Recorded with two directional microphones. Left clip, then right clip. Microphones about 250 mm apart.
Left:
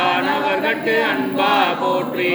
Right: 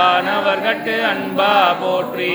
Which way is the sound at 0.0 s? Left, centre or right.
Right.